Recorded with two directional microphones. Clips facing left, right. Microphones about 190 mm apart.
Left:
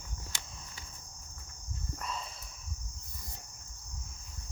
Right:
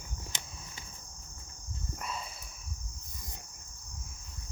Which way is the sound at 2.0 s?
10° right (ahead or behind).